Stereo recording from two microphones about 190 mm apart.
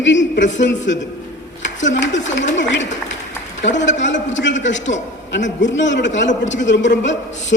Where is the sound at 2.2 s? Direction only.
70° left (ahead or behind).